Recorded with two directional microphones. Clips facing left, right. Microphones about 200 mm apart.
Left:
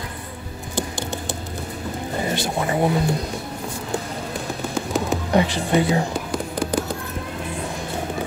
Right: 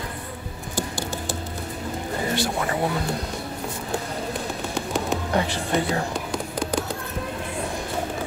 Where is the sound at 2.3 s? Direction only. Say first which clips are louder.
Left 2 dB; 20° left (ahead or behind).